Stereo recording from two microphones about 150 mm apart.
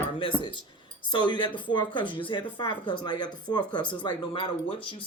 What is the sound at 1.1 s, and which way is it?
Speech, 30° left (ahead or behind).